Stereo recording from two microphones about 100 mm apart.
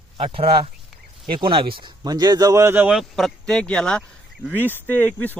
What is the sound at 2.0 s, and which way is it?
Speech, 40° right (ahead or behind).